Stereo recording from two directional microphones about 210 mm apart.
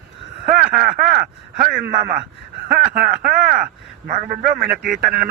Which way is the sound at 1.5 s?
40° right (ahead or behind).